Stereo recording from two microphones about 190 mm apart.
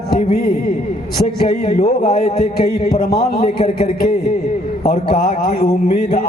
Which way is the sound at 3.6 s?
35° left (ahead or behind).